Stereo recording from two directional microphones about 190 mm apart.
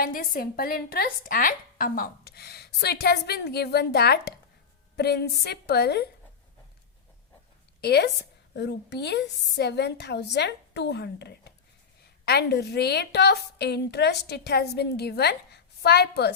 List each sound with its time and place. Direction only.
0.0 s a woman's voice: 50° left (ahead or behind)
7.8 s a woman's voice: 60° left (ahead or behind)